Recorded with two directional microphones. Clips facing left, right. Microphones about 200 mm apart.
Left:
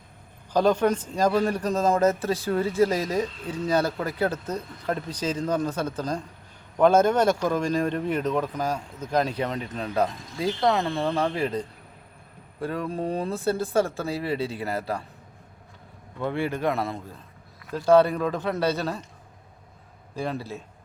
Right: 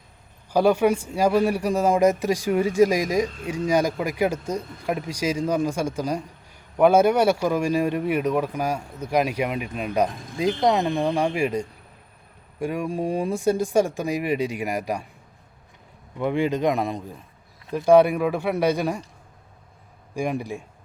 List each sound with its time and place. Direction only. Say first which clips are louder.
0.5 s speech: right 2 dB; 10° right (ahead or behind)
16.1 s speech: right 5 dB; 15° right (ahead or behind)
20.1 s speech: right 4 dB; 15° right (ahead or behind)